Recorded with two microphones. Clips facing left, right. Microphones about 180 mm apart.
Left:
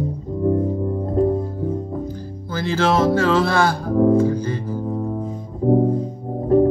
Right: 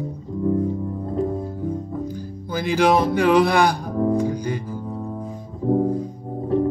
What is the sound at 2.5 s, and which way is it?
Music, 15° right (ahead or behind).